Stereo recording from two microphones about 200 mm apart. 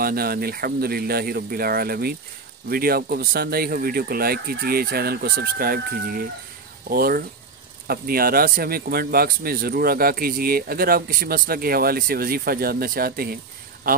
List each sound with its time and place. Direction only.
0.0 s a man's voice: 50° right (ahead or behind)